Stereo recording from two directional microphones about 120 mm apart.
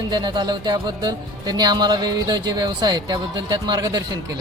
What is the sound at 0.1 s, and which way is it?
Speech, 35° right (ahead or behind).